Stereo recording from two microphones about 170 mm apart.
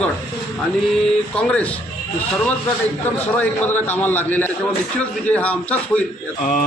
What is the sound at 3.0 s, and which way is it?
A man's voice, 10° left (ahead or behind).